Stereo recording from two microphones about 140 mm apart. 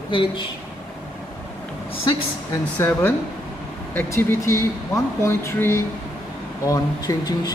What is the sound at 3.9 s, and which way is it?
Speech, 15° left (ahead or behind).